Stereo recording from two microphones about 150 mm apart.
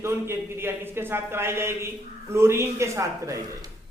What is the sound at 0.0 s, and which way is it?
A man's voice, 15° right (ahead or behind).